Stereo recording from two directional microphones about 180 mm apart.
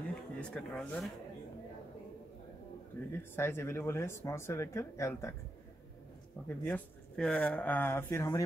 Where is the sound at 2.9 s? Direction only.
10° left (ahead or behind).